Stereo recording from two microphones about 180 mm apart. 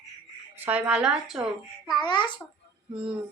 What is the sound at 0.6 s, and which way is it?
Speech, 5° right (ahead or behind).